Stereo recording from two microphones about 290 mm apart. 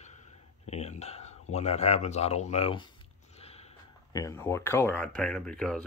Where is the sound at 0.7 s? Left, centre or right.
Left.